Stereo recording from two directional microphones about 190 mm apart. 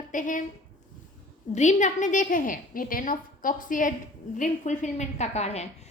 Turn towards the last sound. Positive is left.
turn(degrees=35)  # may be behind; listen again after turning